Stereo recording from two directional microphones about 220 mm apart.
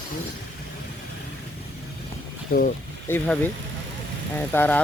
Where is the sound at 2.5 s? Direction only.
40° left (ahead or behind).